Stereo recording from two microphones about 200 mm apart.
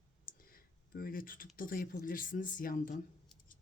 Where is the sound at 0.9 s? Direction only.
45° left (ahead or behind).